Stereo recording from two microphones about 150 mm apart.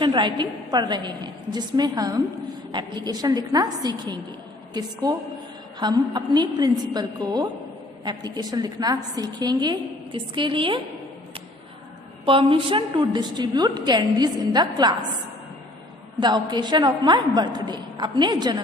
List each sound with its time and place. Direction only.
0.0 s a woman's voice: 30° right (ahead or behind)
12.2 s a woman's voice: 35° right (ahead or behind)
16.2 s a woman's voice: 30° right (ahead or behind)